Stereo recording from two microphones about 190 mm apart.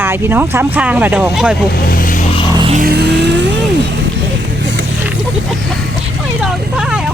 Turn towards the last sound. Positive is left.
turn(degrees=-5)  # may be behind; listen again after turning